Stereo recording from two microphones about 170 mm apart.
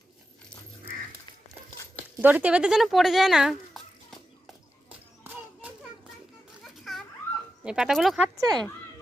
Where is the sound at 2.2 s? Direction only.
10° right (ahead or behind).